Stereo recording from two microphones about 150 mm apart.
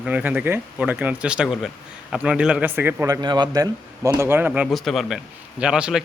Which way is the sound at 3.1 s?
30° right (ahead or behind).